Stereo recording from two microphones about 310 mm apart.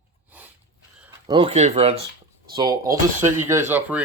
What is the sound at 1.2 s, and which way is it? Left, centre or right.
Speech, centre.